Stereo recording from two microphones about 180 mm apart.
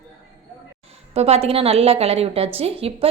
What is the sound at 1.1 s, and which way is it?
A woman's voice, 35° right (ahead or behind).